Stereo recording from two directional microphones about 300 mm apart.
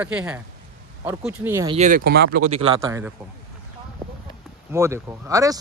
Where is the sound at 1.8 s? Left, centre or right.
Right.